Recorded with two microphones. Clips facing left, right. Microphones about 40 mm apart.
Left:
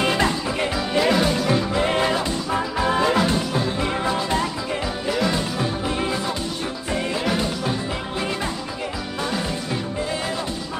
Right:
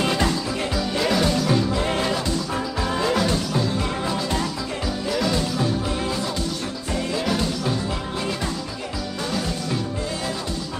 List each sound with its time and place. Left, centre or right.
0.0 s music: left
5.9 s music: left